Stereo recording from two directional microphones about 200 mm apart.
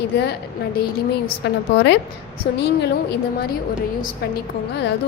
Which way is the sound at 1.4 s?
60° left (ahead or behind).